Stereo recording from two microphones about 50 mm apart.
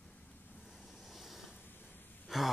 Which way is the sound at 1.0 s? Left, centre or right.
Centre.